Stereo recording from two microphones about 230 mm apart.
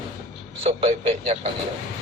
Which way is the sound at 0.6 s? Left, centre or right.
Right.